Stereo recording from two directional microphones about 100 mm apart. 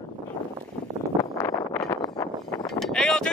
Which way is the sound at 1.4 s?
20° left (ahead or behind).